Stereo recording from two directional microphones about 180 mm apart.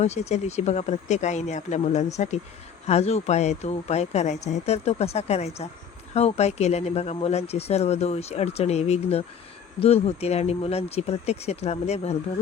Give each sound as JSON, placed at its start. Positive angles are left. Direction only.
{"t": 0.0, "sound": "speech", "side_deg": 40}